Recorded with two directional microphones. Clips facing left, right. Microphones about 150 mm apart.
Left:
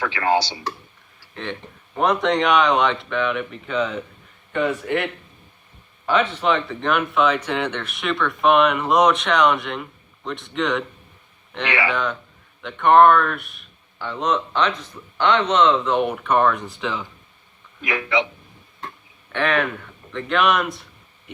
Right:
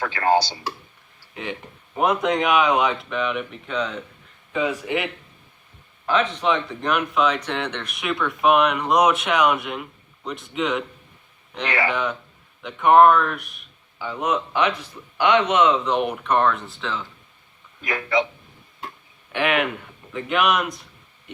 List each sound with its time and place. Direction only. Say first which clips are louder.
0.0 s speech: right 1 dB; 40° right (ahead or behind)
1.3 s speech: left 1 dB; 10° right (ahead or behind)
12.6 s speech: left 1 dB; 5° right (ahead or behind); by 17.1 s 15° left (ahead or behind)
17.8 s speech: even; 40° right (ahead or behind)
19.3 s speech: even; 15° right (ahead or behind)